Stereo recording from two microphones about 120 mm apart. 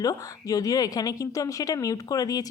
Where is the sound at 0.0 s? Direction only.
30° left (ahead or behind).